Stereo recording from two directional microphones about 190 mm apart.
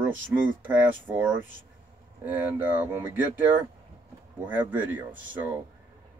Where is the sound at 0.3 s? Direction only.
10° right (ahead or behind).